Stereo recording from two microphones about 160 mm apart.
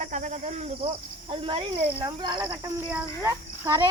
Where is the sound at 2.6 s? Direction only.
10° right (ahead or behind).